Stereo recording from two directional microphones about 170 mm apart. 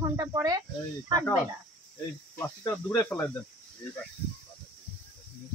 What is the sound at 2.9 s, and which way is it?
Speech, 10° left (ahead or behind).